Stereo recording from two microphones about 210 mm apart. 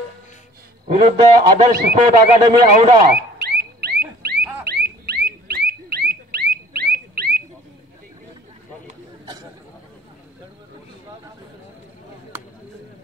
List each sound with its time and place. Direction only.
1.0 s speech: 30° right (ahead or behind)
3.1 s car alarm: 50° right (ahead or behind)
4.4 s rodents: 5° right (ahead or behind)
4.6 s rodents: 50° right (ahead or behind)
9.2 s chatter: 20° right (ahead or behind)